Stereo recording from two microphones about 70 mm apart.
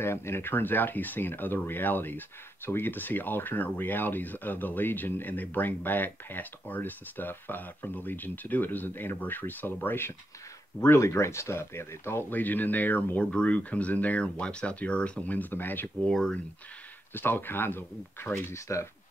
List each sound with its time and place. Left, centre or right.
0.0 s speech: left
11.0 s speech: left
16.1 s speech: centre
17.1 s speech: left